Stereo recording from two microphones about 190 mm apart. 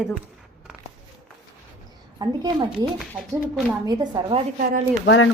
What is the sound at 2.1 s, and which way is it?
Speech, 20° right (ahead or behind).